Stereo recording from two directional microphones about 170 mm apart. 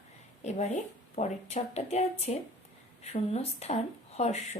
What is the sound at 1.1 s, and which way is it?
A woman's voice, 40° left (ahead or behind).